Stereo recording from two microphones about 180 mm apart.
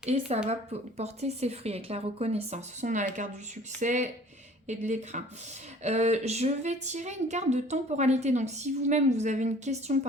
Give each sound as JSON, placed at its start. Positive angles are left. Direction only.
{"t": 0.0, "sound": "speech", "side_deg": -35}